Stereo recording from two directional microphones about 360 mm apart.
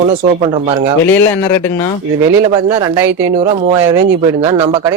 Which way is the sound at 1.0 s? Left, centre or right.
Centre.